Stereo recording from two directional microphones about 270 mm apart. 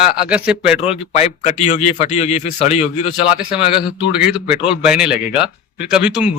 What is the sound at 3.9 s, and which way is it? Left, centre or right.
Speech, centre.